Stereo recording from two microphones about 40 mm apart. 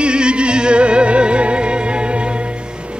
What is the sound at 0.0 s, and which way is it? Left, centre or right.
Music, right.